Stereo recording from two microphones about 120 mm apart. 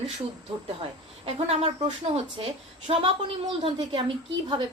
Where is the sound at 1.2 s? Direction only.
55° right (ahead or behind).